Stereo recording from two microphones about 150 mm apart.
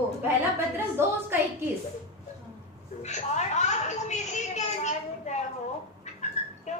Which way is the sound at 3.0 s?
50° left (ahead or behind).